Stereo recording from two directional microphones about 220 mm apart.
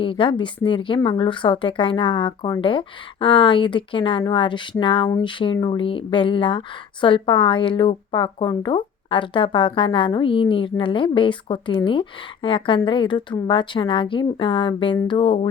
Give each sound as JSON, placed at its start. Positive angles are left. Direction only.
{"t": 0.0, "sound": "a woman's voice", "side_deg": 25}